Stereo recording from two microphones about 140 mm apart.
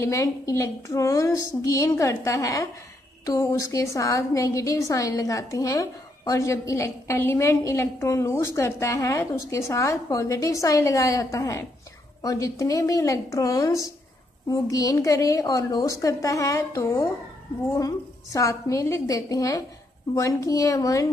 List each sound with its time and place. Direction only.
0.0 s a woman's voice: 25° left (ahead or behind)